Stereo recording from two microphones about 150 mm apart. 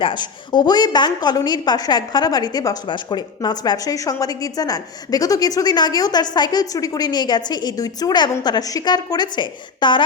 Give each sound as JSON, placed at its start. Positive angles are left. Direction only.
{"t": 0.0, "sound": "a woman's voice", "side_deg": 30}